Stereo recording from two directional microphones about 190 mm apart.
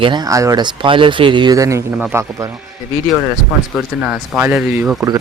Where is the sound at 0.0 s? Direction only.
20° right (ahead or behind).